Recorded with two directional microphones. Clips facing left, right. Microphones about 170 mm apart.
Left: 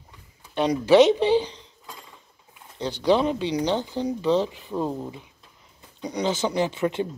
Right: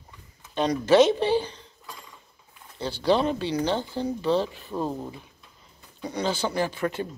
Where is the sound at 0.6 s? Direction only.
15° left (ahead or behind).